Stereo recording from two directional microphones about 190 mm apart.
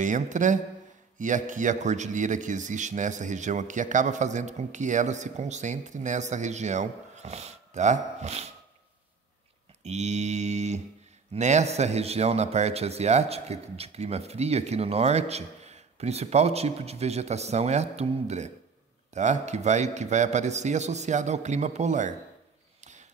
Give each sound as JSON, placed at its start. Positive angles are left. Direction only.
{"t": 0.0, "sound": "speech", "side_deg": -40}
{"t": 9.8, "sound": "speech", "side_deg": -35}